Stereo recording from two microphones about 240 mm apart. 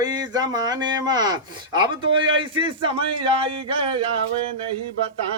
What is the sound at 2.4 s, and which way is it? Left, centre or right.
A man's voice, right.